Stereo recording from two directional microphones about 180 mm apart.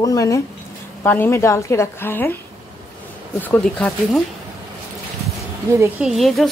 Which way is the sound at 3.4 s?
10° left (ahead or behind).